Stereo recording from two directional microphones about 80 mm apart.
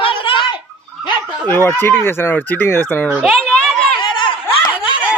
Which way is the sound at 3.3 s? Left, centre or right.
Centre.